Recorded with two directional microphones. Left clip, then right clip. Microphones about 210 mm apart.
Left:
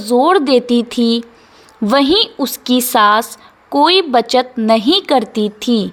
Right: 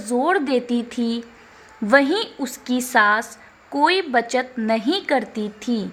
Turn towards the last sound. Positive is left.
turn(degrees=25)  # may be behind; listen again after turning